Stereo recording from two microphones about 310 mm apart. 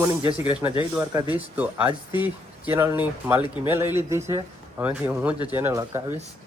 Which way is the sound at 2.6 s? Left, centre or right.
Centre.